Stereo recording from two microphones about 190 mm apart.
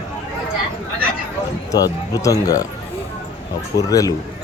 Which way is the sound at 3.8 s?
20° left (ahead or behind).